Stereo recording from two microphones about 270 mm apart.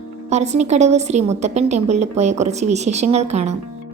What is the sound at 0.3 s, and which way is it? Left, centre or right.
A woman's voice, right.